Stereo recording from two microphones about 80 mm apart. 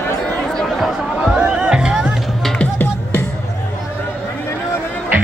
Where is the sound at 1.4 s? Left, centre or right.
Centre.